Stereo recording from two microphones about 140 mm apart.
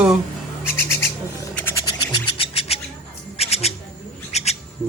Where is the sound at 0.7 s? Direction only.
15° left (ahead or behind).